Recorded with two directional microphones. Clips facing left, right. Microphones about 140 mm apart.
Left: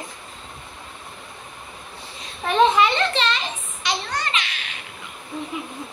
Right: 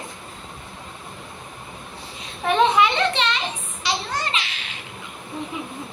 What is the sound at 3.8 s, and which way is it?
Children playing, 30° right (ahead or behind).